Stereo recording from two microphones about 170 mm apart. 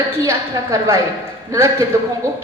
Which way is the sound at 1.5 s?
20° right (ahead or behind).